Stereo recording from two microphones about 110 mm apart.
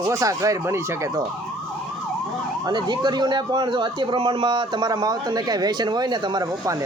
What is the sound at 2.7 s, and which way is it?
Speech, 40° right (ahead or behind).